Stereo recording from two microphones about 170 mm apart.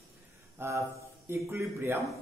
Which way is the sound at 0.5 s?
15° right (ahead or behind).